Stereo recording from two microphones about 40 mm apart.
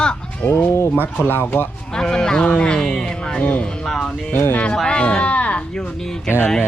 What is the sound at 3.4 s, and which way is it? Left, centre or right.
Speech, left.